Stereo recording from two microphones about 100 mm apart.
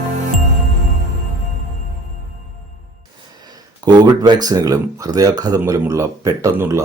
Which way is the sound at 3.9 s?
45° right (ahead or behind).